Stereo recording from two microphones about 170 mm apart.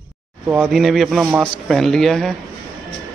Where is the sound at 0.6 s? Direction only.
Centre (ahead or behind).